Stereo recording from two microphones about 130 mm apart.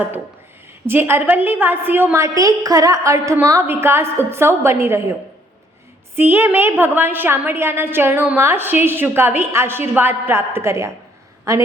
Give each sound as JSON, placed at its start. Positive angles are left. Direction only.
{"t": 0.9, "sound": "a woman's voice", "side_deg": -20}
{"t": 6.1, "sound": "a woman's voice", "side_deg": -15}